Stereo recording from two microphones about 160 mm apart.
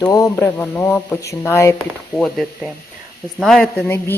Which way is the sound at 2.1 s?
Centre (ahead or behind).